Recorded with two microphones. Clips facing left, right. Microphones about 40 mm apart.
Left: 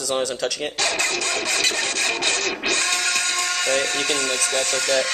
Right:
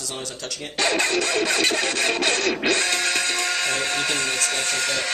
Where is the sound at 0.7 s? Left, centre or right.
Centre.